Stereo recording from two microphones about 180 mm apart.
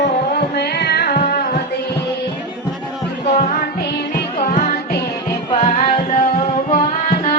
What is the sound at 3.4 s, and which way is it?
Music, 40° left (ahead or behind).